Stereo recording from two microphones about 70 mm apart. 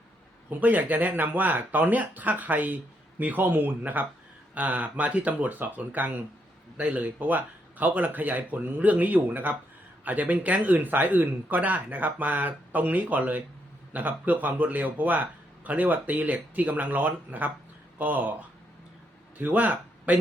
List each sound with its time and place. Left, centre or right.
0.6 s speech: right